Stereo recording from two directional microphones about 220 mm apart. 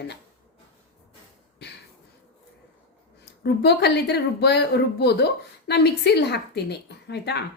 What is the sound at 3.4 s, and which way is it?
A woman's voice, 50° left (ahead or behind).